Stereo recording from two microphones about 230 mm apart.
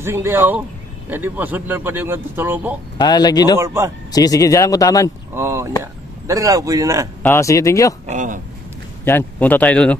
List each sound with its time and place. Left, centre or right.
0.0 s speech: centre
3.0 s speech: centre
3.5 s speech: centre
4.1 s speech: centre
5.3 s speech: centre
7.2 s speech: centre
8.1 s a man's voice: right
9.0 s speech: centre